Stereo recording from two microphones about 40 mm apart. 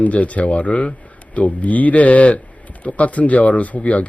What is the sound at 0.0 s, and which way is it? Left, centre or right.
Speech, left.